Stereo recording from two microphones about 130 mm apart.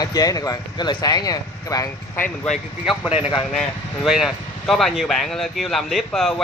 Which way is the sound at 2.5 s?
Centre (ahead or behind).